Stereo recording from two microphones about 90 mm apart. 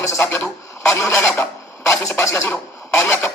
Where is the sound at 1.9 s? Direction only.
30° left (ahead or behind).